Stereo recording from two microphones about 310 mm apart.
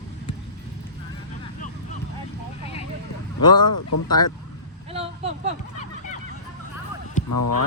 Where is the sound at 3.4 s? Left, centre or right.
Centre.